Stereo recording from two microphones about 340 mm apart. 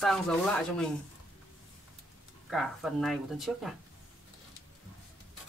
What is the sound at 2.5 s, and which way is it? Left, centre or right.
Speech, centre.